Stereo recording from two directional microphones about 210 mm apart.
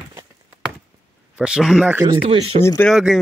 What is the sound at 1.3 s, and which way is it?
Speech, 5° right (ahead or behind).